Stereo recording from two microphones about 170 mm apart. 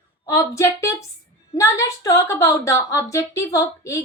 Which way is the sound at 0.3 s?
15° left (ahead or behind).